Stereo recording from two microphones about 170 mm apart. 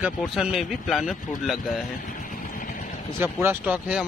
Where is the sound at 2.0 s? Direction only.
55° left (ahead or behind).